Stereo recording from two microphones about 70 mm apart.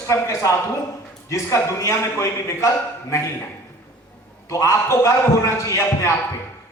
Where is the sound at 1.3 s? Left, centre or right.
Left.